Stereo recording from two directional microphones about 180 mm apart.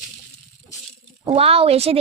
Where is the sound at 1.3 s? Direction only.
30° right (ahead or behind).